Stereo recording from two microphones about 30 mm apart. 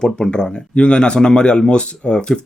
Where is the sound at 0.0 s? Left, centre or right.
Left.